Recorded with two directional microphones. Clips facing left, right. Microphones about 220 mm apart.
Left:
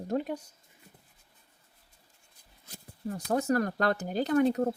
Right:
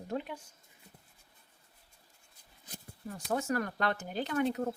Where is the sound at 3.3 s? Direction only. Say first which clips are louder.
Left 5 dB; 40° left (ahead or behind).